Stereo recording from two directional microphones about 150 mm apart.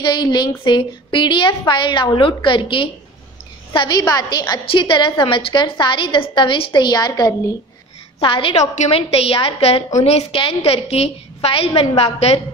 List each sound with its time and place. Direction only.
0.0 s a woman's voice: 30° left (ahead or behind)
8.2 s a woman's voice: 35° left (ahead or behind)